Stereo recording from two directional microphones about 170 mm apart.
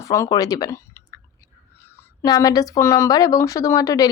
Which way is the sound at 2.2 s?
20° left (ahead or behind).